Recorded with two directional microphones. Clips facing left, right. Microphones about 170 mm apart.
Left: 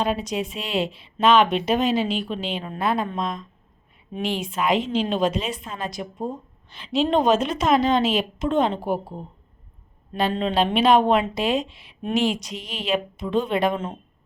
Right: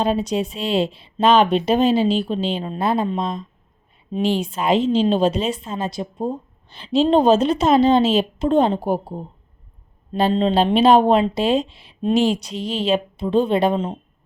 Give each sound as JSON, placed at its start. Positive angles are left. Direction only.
{"t": 0.0, "sound": "speech", "side_deg": -30}